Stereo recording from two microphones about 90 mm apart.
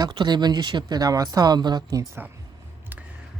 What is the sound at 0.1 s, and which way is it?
Speech, 60° right (ahead or behind).